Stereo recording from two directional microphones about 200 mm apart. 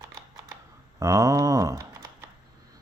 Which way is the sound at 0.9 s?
15° right (ahead or behind).